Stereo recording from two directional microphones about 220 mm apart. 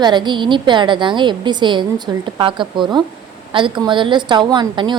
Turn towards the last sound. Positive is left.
turn(degrees=-20)  # may be behind; listen again after turning